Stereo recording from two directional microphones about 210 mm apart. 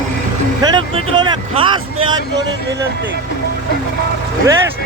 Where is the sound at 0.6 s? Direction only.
20° right (ahead or behind).